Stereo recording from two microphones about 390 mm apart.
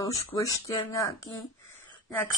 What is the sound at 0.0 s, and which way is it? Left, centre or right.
Speech, centre.